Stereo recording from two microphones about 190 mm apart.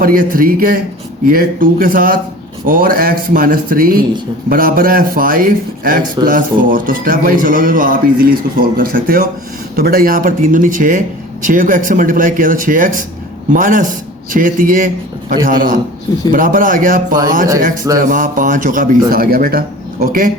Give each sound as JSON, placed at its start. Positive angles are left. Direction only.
{"t": 0.0, "sound": "speech", "side_deg": -50}